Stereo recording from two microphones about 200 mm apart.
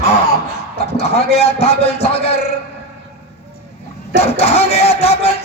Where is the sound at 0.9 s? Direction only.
30° left (ahead or behind).